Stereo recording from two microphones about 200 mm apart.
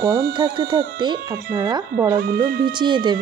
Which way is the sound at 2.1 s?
45° right (ahead or behind).